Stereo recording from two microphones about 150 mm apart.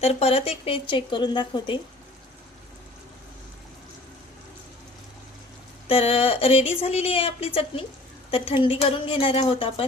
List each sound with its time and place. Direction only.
0.0 s a woman's voice: 45° left (ahead or behind)
5.9 s a woman's voice: 40° left (ahead or behind)